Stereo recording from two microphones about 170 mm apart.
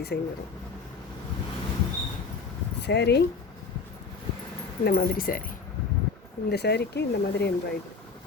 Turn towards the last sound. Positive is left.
turn(degrees=75)  # may be behind; listen again after turning